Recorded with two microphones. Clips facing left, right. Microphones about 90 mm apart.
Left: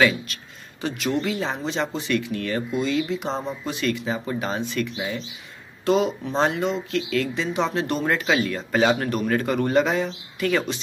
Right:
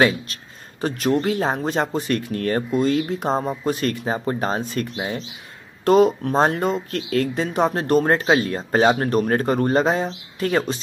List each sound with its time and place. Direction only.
0.0 s speech: 40° right (ahead or behind)